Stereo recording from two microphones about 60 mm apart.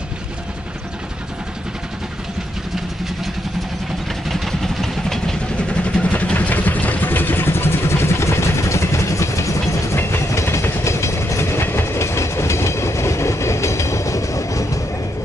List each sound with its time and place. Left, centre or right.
4.3 s vehicle: centre
5.7 s vehicle: centre; by 9.6 s left
9.9 s train: left